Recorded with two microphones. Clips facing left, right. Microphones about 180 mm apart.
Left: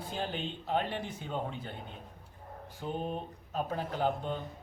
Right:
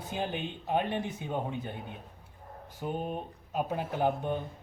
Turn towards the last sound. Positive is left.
turn(degrees=-15)  # may be behind; listen again after turning